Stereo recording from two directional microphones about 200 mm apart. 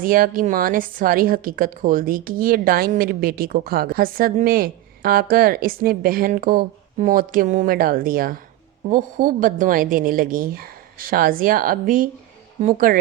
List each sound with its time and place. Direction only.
0.0 s a woman's voice: 45° right (ahead or behind)